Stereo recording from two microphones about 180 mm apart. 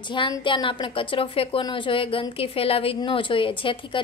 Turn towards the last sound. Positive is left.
turn(degrees=30)  # may be behind; listen again after turning